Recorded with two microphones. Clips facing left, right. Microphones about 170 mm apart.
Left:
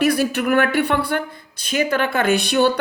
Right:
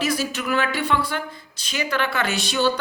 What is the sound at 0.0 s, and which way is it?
A woman's voice, 60° left (ahead or behind).